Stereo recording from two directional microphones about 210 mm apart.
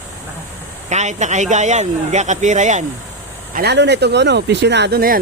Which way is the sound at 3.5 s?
50° right (ahead or behind).